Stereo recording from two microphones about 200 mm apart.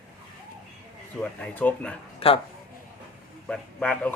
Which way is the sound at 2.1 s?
25° left (ahead or behind).